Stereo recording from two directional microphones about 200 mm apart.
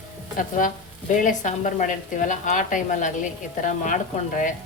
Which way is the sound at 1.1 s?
40° left (ahead or behind).